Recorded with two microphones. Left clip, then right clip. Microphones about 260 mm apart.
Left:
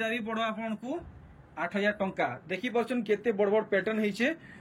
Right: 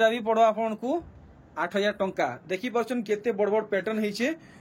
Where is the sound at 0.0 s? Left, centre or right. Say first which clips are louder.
Right 10 dB; centre.